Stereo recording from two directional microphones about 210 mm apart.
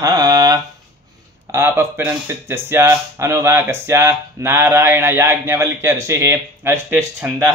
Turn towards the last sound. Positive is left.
turn(degrees=-10)  # may be behind; listen again after turning